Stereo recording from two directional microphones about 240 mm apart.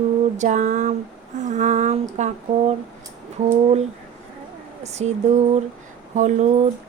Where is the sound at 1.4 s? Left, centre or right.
Right.